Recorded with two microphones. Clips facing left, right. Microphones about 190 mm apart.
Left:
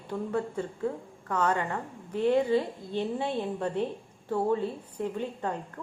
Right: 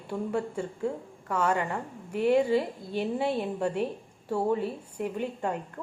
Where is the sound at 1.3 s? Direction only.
10° right (ahead or behind).